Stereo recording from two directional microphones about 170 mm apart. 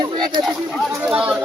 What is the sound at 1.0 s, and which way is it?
Speech, 5° right (ahead or behind).